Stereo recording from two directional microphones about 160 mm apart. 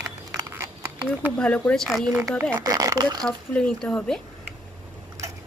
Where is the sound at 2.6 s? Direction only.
25° right (ahead or behind).